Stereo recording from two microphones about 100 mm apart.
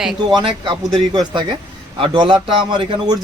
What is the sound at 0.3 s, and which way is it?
A man's voice, 55° right (ahead or behind).